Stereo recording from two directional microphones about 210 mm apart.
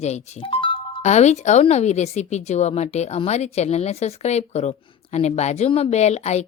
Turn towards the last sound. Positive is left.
turn(degrees=30)  # may be behind; listen again after turning